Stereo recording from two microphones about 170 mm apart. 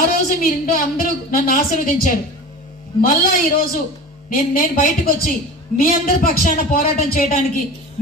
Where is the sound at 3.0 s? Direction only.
55° left (ahead or behind).